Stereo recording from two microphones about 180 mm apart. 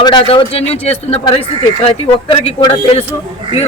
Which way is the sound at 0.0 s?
25° left (ahead or behind).